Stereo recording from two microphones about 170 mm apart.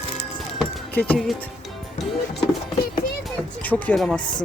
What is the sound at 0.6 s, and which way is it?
Speech, 10° left (ahead or behind).